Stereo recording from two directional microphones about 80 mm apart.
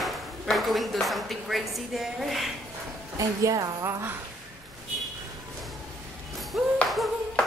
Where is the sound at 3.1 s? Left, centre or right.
Right.